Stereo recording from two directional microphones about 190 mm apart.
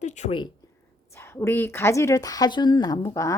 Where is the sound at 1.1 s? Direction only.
15° left (ahead or behind).